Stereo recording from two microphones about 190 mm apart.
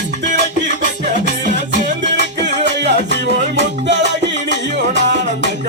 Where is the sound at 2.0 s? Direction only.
65° right (ahead or behind).